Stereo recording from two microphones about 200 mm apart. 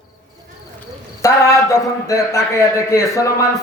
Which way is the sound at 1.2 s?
15° left (ahead or behind).